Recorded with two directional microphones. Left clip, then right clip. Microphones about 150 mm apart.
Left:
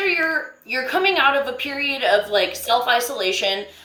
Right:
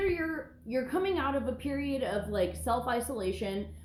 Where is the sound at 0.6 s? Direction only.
15° left (ahead or behind).